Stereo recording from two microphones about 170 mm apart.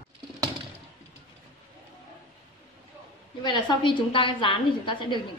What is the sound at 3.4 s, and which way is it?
A woman's voice, 25° left (ahead or behind).